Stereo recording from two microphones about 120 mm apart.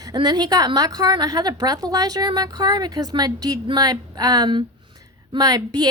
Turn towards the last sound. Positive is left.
turn(degrees=-30)  # may be behind; listen again after turning